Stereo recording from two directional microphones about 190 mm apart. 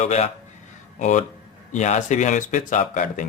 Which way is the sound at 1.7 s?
40° left (ahead or behind).